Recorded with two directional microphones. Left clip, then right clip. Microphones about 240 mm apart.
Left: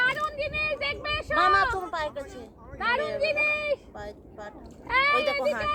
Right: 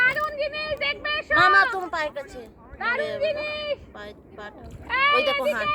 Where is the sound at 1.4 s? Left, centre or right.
Right.